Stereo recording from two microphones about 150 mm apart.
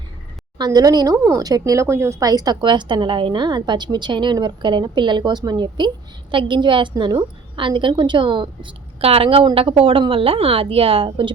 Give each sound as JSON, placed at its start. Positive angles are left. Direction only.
{"t": 0.6, "sound": "a woman's voice", "side_deg": -25}